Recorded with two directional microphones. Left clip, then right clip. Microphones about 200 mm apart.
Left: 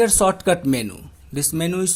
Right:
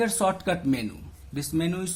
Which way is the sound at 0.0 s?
35° left (ahead or behind).